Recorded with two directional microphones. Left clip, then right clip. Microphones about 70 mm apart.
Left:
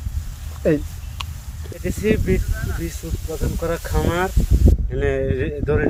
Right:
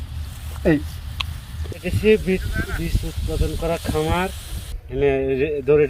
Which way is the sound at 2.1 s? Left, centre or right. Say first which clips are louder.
Right 2 dB; left.